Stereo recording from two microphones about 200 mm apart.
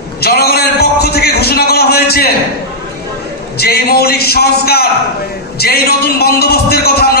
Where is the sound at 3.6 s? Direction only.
50° left (ahead or behind).